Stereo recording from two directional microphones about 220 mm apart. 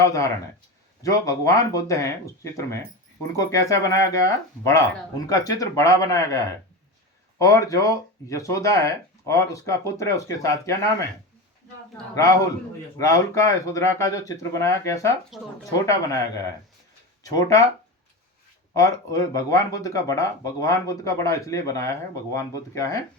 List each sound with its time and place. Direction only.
0.0 s speech: 15° left (ahead or behind)
12.1 s speech: 15° left (ahead or behind)
15.3 s speech: centre (ahead or behind)
15.9 s speech: 15° left (ahead or behind)
17.2 s speech: 15° left (ahead or behind)
18.8 s speech: 15° left (ahead or behind)